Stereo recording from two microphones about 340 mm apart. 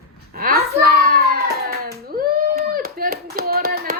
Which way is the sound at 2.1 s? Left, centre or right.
Right.